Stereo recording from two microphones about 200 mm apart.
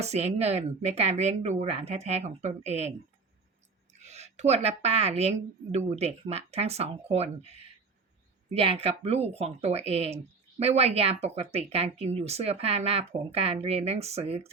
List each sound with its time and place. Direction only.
0.0 s speech: 35° right (ahead or behind)
4.0 s speech: 35° right (ahead or behind)